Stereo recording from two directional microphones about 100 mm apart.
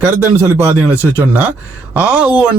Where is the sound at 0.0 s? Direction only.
15° right (ahead or behind).